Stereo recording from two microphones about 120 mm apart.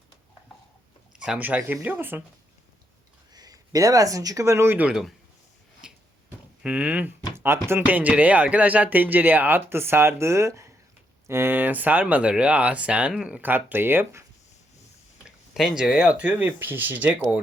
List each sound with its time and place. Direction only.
1.1 s speech: 5° right (ahead or behind)
3.3 s speech: 30° right (ahead or behind)
4.9 s speech: 5° right (ahead or behind)
5.8 s a sound: 5° right (ahead or behind)
6.6 s speech: 10° right (ahead or behind)
15.2 s speech: 5° right (ahead or behind)